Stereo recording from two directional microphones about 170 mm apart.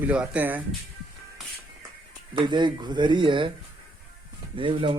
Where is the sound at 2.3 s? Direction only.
25° right (ahead or behind).